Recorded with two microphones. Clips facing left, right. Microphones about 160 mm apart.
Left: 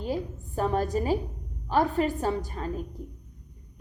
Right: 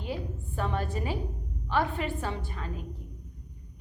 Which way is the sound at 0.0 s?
40° left (ahead or behind).